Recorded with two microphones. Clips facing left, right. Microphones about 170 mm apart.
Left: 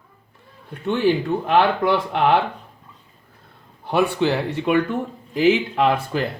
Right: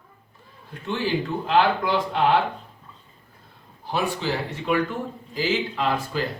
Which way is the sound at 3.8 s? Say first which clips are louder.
Left 7 dB; 60° left (ahead or behind).